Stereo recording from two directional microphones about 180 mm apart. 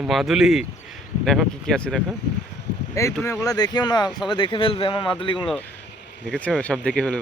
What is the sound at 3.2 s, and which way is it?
Speech, 20° left (ahead or behind).